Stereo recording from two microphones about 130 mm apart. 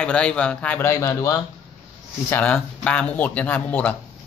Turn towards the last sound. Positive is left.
turn(degrees=10)  # may be behind; listen again after turning